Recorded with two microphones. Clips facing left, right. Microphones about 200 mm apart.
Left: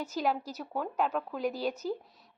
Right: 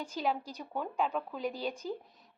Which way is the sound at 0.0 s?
10° left (ahead or behind).